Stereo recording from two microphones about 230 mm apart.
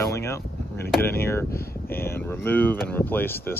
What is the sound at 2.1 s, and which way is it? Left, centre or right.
Speech, centre.